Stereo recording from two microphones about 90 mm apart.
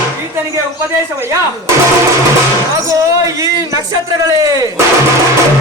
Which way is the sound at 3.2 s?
40° right (ahead or behind).